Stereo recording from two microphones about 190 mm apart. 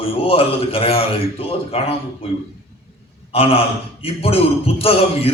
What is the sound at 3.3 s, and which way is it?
A man's voice, 30° left (ahead or behind).